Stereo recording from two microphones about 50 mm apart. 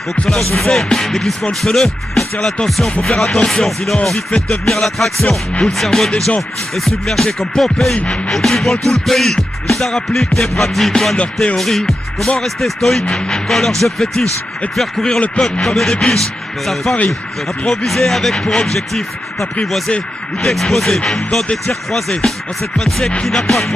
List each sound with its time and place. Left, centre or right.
0.1 s speech: centre
4.6 s music: centre
6.8 s speech: centre
7.9 s music: centre
8.3 s music: centre
13.1 s speech: centre
15.1 s music: left
15.6 s speech: centre
17.6 s speech: centre
20.4 s speech: centre
22.8 s music: centre